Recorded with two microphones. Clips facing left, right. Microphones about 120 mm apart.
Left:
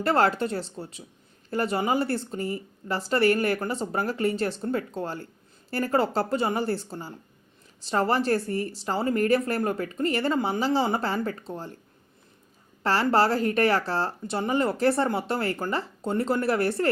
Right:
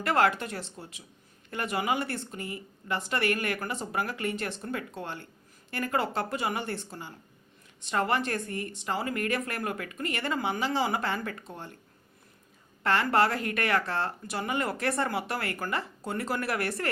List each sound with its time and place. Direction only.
0.0 s speech: 30° left (ahead or behind)
12.8 s speech: 35° left (ahead or behind)